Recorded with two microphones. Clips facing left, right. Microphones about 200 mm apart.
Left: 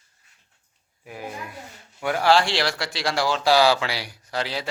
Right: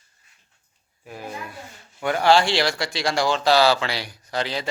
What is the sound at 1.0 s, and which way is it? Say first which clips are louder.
A man's voice: even; 10° left (ahead or behind).